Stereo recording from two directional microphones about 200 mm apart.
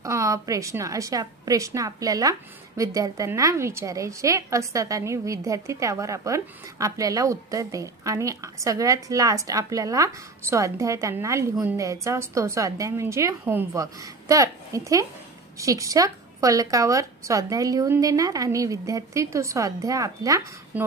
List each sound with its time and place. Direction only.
0.0 s a woman's voice: 15° right (ahead or behind)